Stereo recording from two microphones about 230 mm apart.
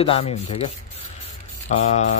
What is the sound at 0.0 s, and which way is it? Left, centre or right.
Speech, left.